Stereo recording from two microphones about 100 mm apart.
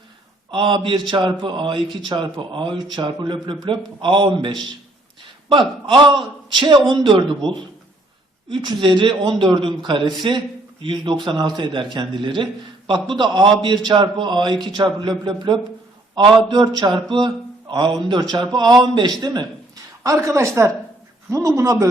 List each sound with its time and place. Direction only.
0.5 s a man's voice: 60° right (ahead or behind)
19.2 s a sound: 45° right (ahead or behind)
20.1 s a woman's voice: 30° right (ahead or behind)